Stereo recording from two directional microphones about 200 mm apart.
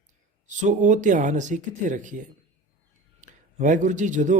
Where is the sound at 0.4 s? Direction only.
40° right (ahead or behind).